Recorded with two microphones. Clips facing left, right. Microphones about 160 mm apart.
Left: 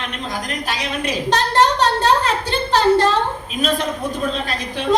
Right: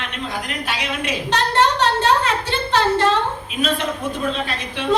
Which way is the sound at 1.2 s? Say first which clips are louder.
Left 2 dB; 40° left (ahead or behind).